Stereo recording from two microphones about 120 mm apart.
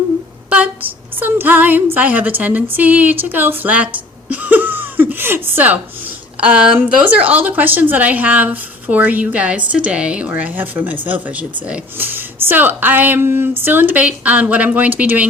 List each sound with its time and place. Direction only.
0.5 s a woman's voice: 15° right (ahead or behind)
4.3 s a sound: 15° right (ahead or behind)
6.4 s a woman's voice: 10° right (ahead or behind)